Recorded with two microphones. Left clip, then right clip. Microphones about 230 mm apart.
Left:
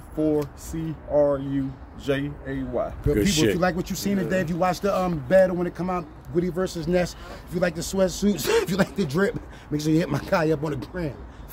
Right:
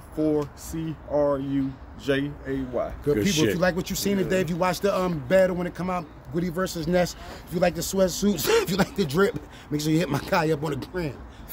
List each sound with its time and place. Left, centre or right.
0.2 s speech: centre
3.5 s speech: centre